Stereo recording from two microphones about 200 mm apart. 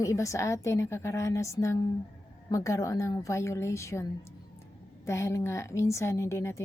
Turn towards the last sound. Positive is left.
turn(degrees=15)  # may be behind; listen again after turning